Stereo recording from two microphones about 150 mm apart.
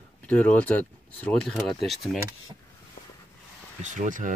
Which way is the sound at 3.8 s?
55° right (ahead or behind).